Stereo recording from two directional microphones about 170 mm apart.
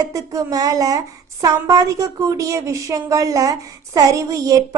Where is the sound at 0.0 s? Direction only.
20° right (ahead or behind).